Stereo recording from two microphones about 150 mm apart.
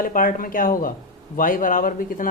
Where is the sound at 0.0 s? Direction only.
65° left (ahead or behind).